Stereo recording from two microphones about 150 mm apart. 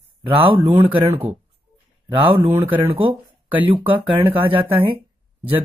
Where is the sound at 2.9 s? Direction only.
35° right (ahead or behind).